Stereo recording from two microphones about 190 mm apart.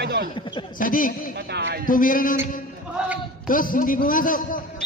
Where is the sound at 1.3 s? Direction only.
60° right (ahead or behind).